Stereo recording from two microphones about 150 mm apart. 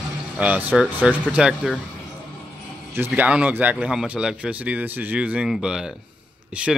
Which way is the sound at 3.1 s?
10° right (ahead or behind).